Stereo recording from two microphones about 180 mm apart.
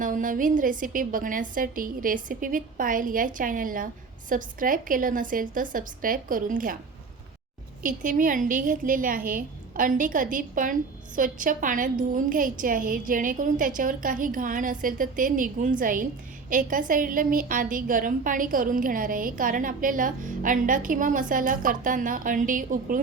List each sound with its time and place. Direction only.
0.0 s a woman's voice: 45° right (ahead or behind)
7.8 s a woman's voice: 50° right (ahead or behind)